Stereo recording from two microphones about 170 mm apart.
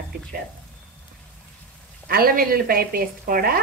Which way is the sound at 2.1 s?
60° right (ahead or behind).